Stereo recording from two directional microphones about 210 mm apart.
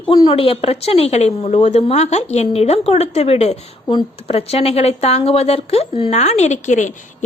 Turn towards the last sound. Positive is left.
turn(degrees=35)  # may be behind; listen again after turning